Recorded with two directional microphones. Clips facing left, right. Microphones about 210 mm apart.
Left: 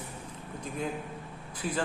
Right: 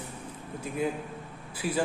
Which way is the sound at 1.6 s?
5° right (ahead or behind).